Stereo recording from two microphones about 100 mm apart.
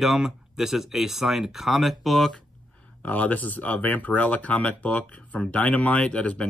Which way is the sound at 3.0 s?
15° left (ahead or behind).